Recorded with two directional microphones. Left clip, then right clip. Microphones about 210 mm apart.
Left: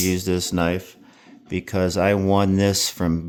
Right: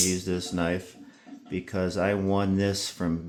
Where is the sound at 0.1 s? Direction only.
50° left (ahead or behind).